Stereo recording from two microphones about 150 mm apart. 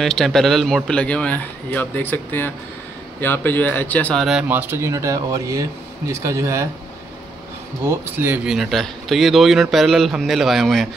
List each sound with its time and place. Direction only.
0.0 s speech: centre (ahead or behind); by 6.7 s 20° right (ahead or behind)
7.8 s speech: 15° right (ahead or behind)
8.5 s speech: centre (ahead or behind)